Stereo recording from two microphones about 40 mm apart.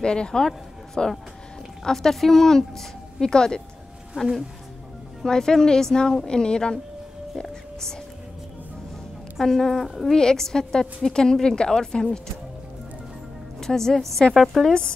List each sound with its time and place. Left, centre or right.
0.0 s speech: left
1.9 s speech: centre
4.2 s speech: right
5.2 s speech: centre
7.4 s music: centre
9.4 s a woman's voice: centre
10.1 s speech: centre
13.6 s a woman's voice: centre